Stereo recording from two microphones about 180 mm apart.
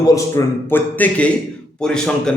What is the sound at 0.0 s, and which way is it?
A man's voice, 20° left (ahead or behind).